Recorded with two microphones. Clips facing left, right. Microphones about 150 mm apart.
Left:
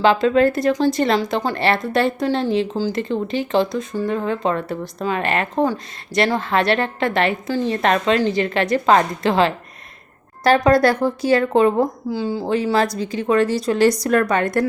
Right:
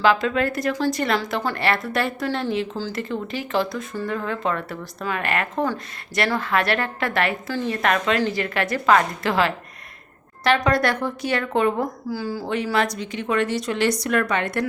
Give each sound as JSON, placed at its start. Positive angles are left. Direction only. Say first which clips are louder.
{"t": 0.0, "sound": "speech", "louder": "left 5 dB", "side_deg": 25}